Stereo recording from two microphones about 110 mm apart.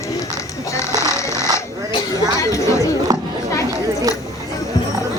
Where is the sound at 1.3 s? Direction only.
35° right (ahead or behind).